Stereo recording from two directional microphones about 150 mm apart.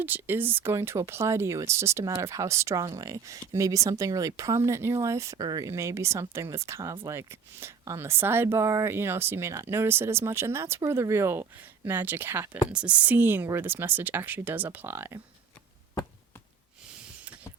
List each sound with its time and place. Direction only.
0.0 s speech: 15° right (ahead or behind)
17.2 s mechanisms: 10° right (ahead or behind)